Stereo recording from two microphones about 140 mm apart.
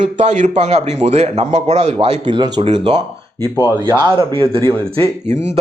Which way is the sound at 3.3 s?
30° left (ahead or behind).